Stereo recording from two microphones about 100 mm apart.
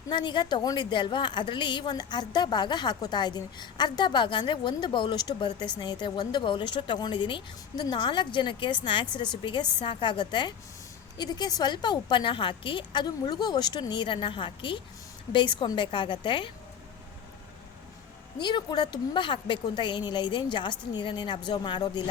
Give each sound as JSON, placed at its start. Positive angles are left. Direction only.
{"t": 0.1, "sound": "a woman's voice", "side_deg": 50}
{"t": 18.3, "sound": "a woman's voice", "side_deg": 50}